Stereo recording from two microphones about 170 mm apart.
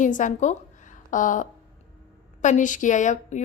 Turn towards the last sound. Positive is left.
turn(degrees=45)  # may be behind; listen again after turning